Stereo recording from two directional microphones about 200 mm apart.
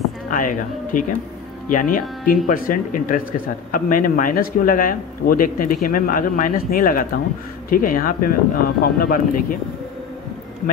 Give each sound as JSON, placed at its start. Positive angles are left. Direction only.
{"t": 0.3, "sound": "speech", "side_deg": 40}